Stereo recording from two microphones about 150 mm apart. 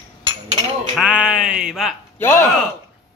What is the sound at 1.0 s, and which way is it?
Speech, 5° right (ahead or behind).